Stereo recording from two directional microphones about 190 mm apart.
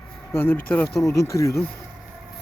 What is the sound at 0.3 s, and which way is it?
Speech, 10° left (ahead or behind).